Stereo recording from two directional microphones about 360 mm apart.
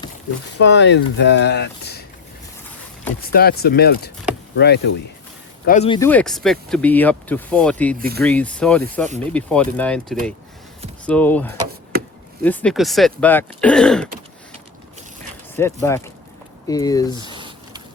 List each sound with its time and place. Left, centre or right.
0.6 s speech: left
3.2 s speech: left; by 7.9 s centre
7.9 s speech: right
8.2 s speech: centre
15.5 s speech: centre
17.3 s a sound: centre